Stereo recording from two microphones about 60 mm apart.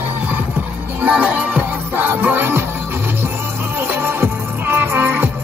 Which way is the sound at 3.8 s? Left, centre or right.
Right.